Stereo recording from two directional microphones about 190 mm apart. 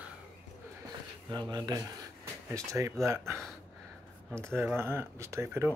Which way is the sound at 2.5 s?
15° right (ahead or behind).